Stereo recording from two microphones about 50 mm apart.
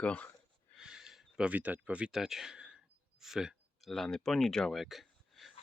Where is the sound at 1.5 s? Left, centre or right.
Right.